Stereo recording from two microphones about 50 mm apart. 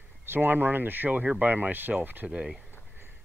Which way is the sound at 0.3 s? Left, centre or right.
Right.